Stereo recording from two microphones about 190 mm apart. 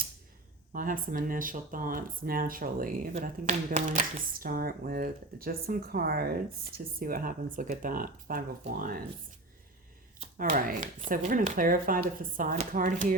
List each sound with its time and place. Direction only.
0.7 s speech: 45° right (ahead or behind)
10.3 s speech: 45° right (ahead or behind)